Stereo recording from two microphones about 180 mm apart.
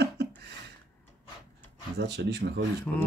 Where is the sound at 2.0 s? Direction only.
70° right (ahead or behind).